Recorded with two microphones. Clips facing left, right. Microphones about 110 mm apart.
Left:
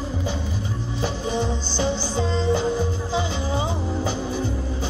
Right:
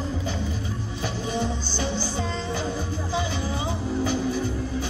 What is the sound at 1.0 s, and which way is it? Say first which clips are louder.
Music: left 3 dB; 25° left (ahead or behind).